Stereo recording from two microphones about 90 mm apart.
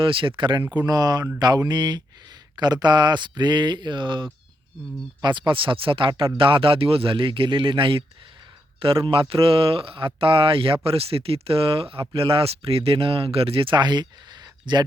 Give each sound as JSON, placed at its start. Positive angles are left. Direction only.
{"t": 0.0, "sound": "speech", "side_deg": -75}
{"t": 0.7, "sound": "speech", "side_deg": -45}